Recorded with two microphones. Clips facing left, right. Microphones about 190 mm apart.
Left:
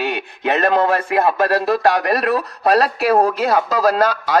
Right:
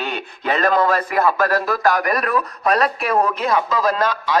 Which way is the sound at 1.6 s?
30° left (ahead or behind).